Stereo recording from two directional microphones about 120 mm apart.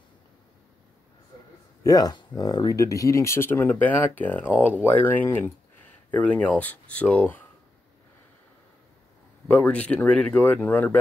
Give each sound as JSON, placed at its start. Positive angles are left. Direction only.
{"t": 1.8, "sound": "speech", "side_deg": 30}
{"t": 9.5, "sound": "speech", "side_deg": 10}